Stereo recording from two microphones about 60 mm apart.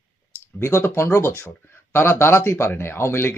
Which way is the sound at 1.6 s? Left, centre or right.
Left.